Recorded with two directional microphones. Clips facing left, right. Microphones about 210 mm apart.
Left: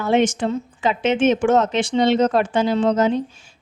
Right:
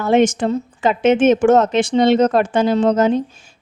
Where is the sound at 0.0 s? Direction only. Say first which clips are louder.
Right 3 dB; 45° right (ahead or behind).